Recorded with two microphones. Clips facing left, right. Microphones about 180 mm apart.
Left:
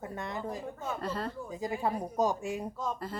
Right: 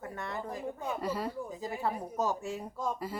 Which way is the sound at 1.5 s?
15° left (ahead or behind).